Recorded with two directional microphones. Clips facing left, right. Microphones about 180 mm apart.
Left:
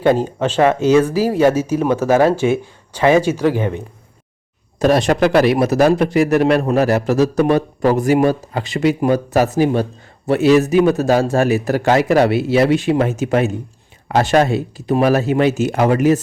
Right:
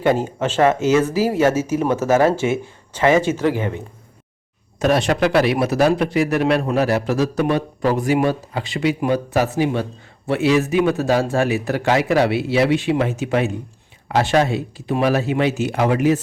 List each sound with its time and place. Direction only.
0.3 s speech: 15° left (ahead or behind)
3.3 s speech: 20° right (ahead or behind)
4.8 s a man's voice: 40° left (ahead or behind)